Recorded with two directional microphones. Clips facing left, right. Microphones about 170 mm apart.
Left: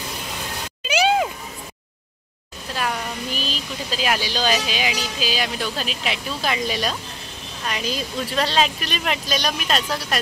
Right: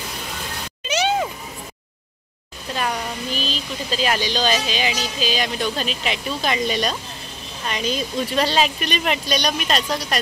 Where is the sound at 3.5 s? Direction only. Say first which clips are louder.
Right 2 dB; 5° left (ahead or behind).